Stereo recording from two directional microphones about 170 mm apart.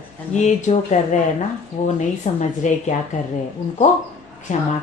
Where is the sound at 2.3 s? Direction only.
40° left (ahead or behind).